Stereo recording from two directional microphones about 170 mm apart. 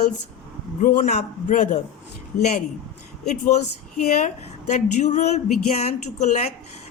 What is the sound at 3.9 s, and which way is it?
Speech, 45° left (ahead or behind).